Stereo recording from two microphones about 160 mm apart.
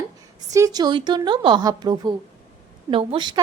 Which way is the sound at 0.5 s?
20° right (ahead or behind).